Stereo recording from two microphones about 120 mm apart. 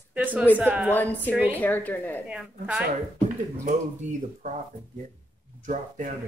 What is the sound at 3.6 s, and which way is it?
Speech, 90° right.